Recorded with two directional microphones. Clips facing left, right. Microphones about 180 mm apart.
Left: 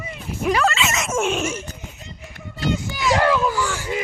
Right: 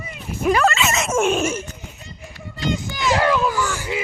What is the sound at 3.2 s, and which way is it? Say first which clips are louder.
Speech: even; 15° right (ahead or behind).